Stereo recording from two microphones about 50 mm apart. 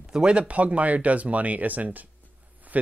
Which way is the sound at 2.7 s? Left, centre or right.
Right.